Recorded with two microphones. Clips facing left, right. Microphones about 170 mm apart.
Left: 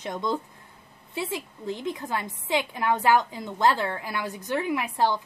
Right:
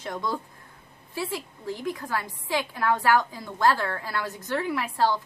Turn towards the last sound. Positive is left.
turn(degrees=15)  # may be behind; listen again after turning